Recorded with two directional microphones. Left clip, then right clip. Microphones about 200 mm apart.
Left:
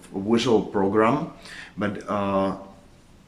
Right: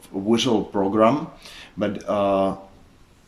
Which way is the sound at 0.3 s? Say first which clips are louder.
Even; 15° right (ahead or behind).